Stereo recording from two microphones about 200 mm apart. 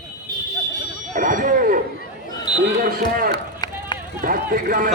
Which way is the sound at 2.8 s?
45° right (ahead or behind).